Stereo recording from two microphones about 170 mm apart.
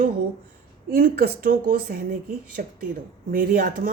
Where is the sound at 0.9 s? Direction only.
60° right (ahead or behind).